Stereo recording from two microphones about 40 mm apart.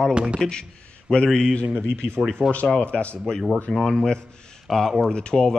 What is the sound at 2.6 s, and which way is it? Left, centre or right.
Speech, left.